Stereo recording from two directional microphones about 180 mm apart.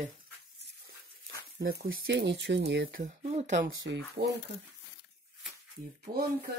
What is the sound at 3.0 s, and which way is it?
Speech, 40° right (ahead or behind).